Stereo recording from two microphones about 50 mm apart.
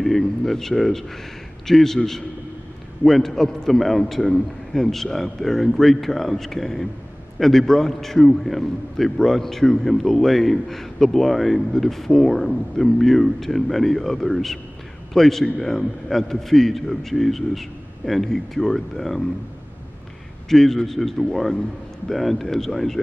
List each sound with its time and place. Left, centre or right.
0.0 s a man's voice: centre
20.4 s a man's voice: centre